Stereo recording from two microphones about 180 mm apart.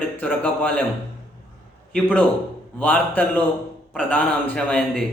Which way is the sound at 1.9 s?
5° left (ahead or behind).